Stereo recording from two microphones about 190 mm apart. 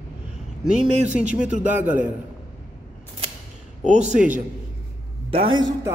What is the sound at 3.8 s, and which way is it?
Speech, 40° right (ahead or behind).